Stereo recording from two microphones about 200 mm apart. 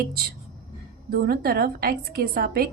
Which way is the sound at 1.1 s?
50° right (ahead or behind).